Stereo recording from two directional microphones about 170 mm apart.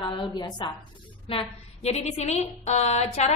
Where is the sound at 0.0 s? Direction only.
25° left (ahead or behind).